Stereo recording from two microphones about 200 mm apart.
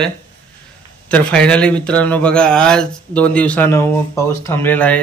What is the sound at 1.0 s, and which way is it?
Speech, 5° left (ahead or behind).